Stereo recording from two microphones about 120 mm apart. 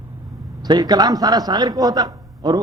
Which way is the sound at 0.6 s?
35° right (ahead or behind).